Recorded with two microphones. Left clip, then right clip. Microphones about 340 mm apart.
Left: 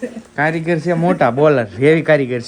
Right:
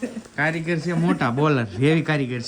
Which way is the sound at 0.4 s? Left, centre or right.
Centre.